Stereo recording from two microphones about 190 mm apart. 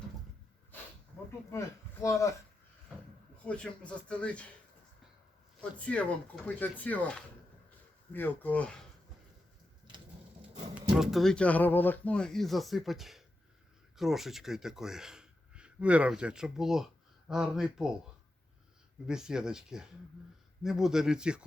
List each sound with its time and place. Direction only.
1.5 s a man's voice: 15° left (ahead or behind)
3.4 s speech: 5° left (ahead or behind)
5.5 s speech: 5° left (ahead or behind)
10.9 s speech: centre (ahead or behind)
19.0 s speech: 5° right (ahead or behind)